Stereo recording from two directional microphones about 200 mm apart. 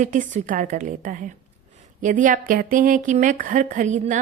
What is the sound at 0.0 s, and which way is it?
Speech, 40° right (ahead or behind).